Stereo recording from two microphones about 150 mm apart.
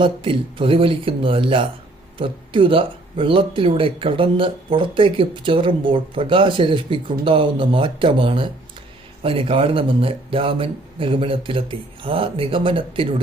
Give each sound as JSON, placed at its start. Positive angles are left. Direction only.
{"t": 0.0, "sound": "speech", "side_deg": -35}